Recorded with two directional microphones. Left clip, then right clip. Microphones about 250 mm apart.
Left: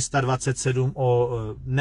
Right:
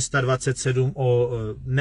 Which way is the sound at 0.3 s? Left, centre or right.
Centre.